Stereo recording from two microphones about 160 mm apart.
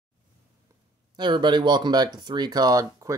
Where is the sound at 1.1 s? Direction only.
30° right (ahead or behind).